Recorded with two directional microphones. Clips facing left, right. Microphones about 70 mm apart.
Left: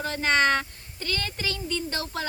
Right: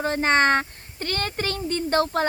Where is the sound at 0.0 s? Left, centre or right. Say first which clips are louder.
Right 3 dB; right.